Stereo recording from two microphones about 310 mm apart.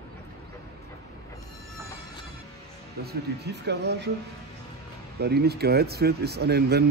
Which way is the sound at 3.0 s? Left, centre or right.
Right.